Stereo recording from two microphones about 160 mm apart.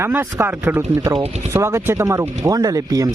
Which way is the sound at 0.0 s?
15° right (ahead or behind).